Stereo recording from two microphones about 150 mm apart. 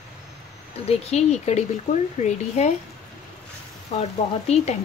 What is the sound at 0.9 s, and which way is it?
Speech, 45° left (ahead or behind).